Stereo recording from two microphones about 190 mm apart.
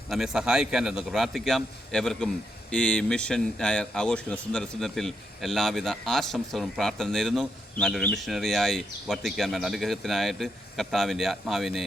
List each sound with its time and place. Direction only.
0.1 s a man's voice: centre (ahead or behind)